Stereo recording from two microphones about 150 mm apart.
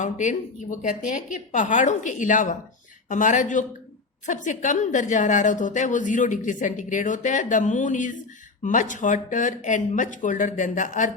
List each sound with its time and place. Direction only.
0.0 s a woman's voice: 55° left (ahead or behind)